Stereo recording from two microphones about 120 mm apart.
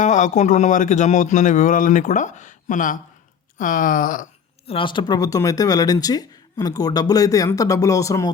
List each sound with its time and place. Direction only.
0.0 s a man's voice: 85° left
4.6 s speech: 50° left (ahead or behind); by 8.3 s 25° left (ahead or behind)